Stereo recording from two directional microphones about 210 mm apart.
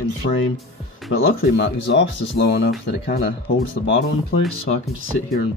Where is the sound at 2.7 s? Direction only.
45° left (ahead or behind).